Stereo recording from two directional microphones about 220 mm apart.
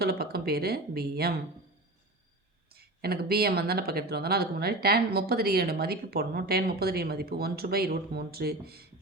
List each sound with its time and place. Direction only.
0.0 s speech: 45° right (ahead or behind)
2.7 s speech: 45° right (ahead or behind)